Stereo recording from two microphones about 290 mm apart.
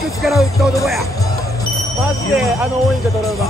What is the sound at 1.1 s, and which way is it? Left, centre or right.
Music, centre.